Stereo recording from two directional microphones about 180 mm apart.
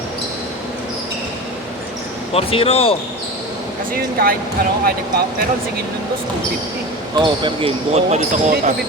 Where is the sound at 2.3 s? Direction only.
35° left (ahead or behind).